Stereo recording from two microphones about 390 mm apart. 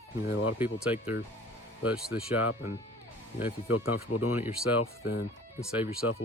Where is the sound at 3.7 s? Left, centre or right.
Left.